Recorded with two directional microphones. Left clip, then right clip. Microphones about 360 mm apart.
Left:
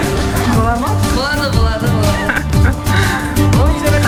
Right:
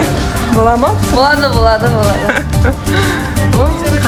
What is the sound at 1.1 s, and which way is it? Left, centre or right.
Speech, centre.